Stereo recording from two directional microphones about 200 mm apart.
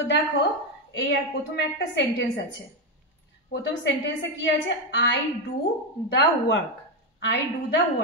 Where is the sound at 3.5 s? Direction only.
60° left (ahead or behind).